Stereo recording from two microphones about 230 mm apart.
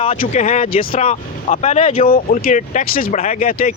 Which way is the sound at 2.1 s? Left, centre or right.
Left.